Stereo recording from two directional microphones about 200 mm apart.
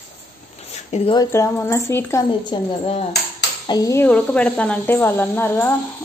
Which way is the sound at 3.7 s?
15° left (ahead or behind).